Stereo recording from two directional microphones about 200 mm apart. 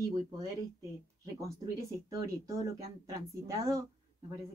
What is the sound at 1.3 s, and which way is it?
Speech, 15° right (ahead or behind).